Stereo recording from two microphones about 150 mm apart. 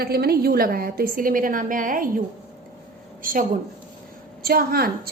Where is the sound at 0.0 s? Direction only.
90° right; by 3.4 s 65° right (ahead or behind).